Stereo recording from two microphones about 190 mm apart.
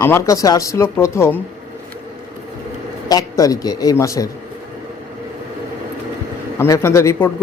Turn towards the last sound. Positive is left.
turn(degrees=15)  # may be behind; listen again after turning